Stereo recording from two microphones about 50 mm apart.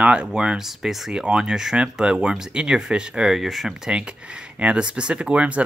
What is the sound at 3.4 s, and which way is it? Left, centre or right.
Speech, centre.